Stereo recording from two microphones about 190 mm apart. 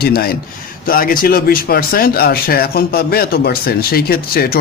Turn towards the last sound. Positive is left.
turn(degrees=50)  # may be behind; listen again after turning